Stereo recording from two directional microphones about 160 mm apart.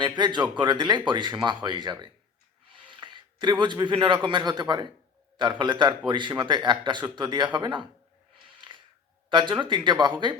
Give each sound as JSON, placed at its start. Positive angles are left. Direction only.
{"t": 0.0, "sound": "speech", "side_deg": -30}
{"t": 9.3, "sound": "speech", "side_deg": -30}